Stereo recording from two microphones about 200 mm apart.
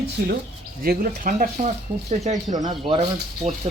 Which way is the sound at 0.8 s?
45° right (ahead or behind).